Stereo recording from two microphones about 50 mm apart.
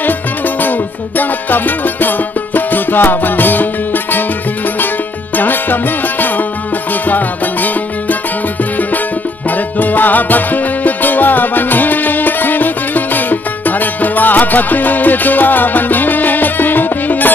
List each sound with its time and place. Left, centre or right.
0.6 s music: left
5.3 s music: left
9.5 s music: left